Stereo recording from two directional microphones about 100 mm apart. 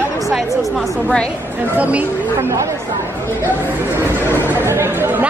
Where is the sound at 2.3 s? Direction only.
30° right (ahead or behind).